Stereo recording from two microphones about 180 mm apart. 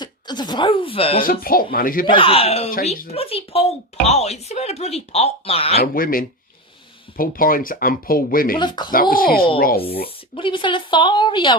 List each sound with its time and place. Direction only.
0.0 s speech: 25° left (ahead or behind)
1.2 s speech: 55° left (ahead or behind)
2.0 s speech: 30° left (ahead or behind)
5.8 s speech: 55° left (ahead or behind)
8.5 s a woman's voice: 25° left (ahead or behind)
8.9 s speech: 50° left (ahead or behind)
10.3 s a woman's voice: 30° left (ahead or behind)